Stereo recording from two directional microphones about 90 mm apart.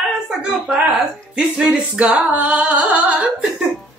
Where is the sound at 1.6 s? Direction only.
10° right (ahead or behind).